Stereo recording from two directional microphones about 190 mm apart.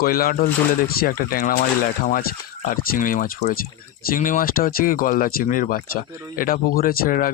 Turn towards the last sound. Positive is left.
turn(degrees=50)  # may be behind; listen again after turning